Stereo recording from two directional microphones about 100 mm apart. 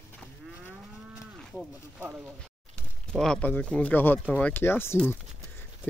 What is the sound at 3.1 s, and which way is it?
Speech, centre (ahead or behind).